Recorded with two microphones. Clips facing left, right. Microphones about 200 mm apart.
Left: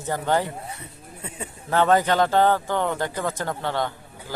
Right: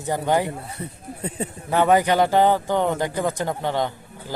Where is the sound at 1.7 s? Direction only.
15° right (ahead or behind).